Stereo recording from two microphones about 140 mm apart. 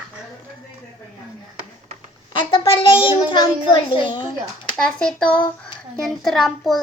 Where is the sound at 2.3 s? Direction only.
40° left (ahead or behind).